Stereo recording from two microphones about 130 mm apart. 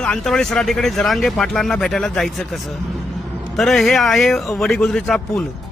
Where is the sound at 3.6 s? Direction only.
Centre (ahead or behind).